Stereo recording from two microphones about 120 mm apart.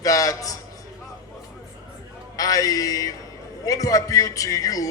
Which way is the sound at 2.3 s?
30° left (ahead or behind).